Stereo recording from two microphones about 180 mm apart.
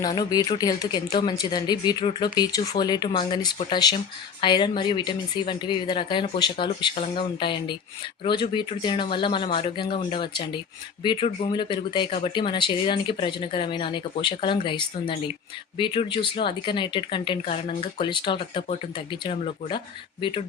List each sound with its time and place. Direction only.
0.0 s speech: 25° left (ahead or behind)